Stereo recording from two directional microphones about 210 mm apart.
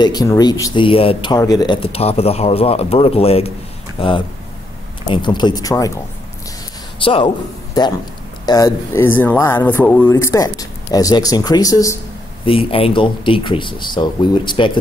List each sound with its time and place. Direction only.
0.0 s speech: 20° left (ahead or behind)
8.5 s speech: 15° left (ahead or behind)
12.4 s speech: 25° left (ahead or behind)